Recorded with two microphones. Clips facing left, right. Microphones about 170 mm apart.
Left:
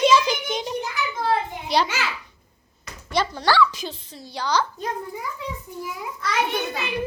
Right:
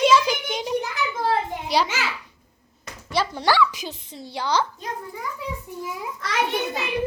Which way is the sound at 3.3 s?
20° right (ahead or behind).